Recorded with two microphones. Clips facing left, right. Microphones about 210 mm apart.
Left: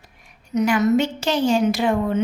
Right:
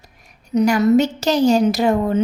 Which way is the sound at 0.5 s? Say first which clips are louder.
Right 4 dB; 35° right (ahead or behind).